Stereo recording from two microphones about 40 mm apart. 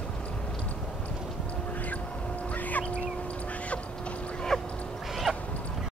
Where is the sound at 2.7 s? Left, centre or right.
Left.